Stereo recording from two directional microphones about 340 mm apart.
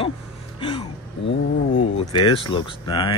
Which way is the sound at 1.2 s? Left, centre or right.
Left.